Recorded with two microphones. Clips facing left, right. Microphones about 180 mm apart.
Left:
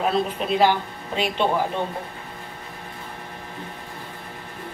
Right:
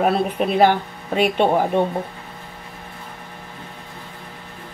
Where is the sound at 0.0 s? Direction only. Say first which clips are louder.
Right 4 dB; 55° right (ahead or behind).